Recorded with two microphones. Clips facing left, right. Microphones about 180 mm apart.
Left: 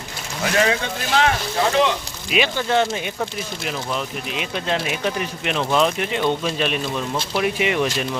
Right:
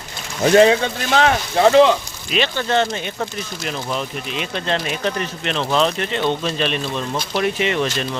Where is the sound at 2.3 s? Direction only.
10° left (ahead or behind).